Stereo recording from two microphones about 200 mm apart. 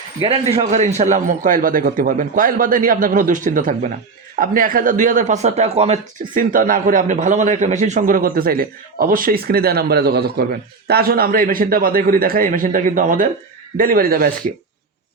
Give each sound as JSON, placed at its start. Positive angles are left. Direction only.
{"t": 0.2, "sound": "a man's voice", "side_deg": -30}